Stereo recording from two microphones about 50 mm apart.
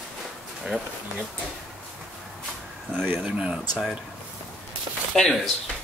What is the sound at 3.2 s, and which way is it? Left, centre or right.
Speech, centre.